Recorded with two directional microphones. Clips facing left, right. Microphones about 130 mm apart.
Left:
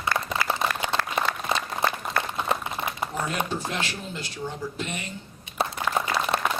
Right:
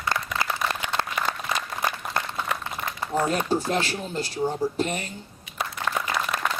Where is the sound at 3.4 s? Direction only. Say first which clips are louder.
Right 6 dB; 35° right (ahead or behind).